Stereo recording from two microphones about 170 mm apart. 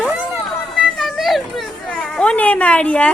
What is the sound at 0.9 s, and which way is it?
Children playing, centre (ahead or behind).